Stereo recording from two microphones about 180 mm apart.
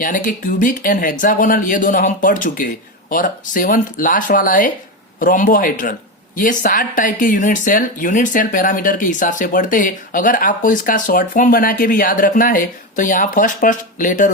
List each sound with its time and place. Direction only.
0.0 s speech: 50° left (ahead or behind)